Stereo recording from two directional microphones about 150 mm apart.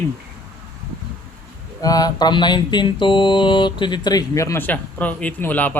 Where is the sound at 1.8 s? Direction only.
25° left (ahead or behind).